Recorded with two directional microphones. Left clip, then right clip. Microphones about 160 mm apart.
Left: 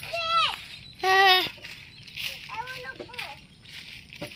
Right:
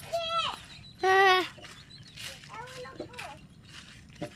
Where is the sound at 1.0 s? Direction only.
80° right.